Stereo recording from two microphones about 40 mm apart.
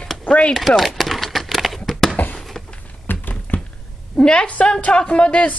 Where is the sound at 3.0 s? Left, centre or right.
Left.